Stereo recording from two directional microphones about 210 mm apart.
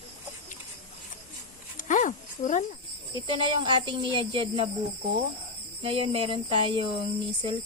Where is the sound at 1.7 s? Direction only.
35° left (ahead or behind).